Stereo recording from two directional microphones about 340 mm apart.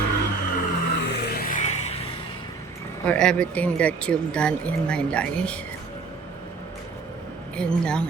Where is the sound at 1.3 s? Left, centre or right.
Left.